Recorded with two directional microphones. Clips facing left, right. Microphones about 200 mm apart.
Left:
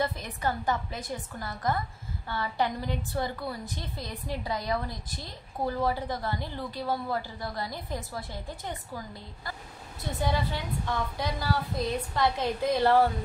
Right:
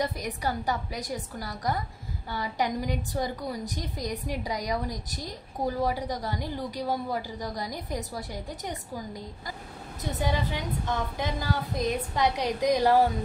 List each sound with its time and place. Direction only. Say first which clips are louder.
0.0 s a woman's voice: even; 15° right (ahead or behind)